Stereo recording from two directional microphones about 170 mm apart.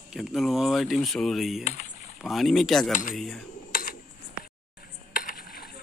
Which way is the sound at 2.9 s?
50° left (ahead or behind).